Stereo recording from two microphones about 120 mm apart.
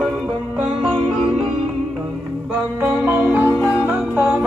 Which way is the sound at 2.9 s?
15° right (ahead or behind).